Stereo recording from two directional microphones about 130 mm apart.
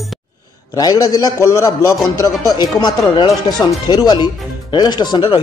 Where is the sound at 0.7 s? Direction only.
30° left (ahead or behind).